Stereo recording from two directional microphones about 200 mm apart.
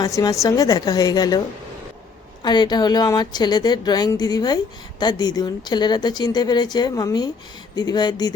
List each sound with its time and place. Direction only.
0.0 s speech: 15° left (ahead or behind)
2.4 s speech: 20° left (ahead or behind)